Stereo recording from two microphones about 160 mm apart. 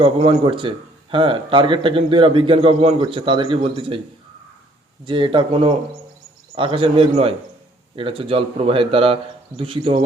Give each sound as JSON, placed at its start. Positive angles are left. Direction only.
{"t": 0.0, "sound": "a man's voice", "side_deg": -35}
{"t": 5.0, "sound": "a man's voice", "side_deg": -30}